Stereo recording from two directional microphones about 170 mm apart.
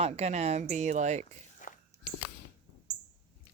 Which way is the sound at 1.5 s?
50° left (ahead or behind).